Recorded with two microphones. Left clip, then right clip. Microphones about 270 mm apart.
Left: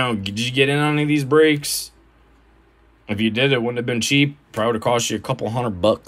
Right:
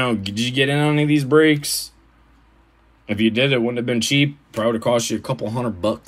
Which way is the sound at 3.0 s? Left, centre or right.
Centre.